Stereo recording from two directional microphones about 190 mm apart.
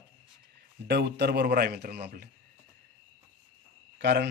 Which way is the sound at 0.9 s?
60° right (ahead or behind).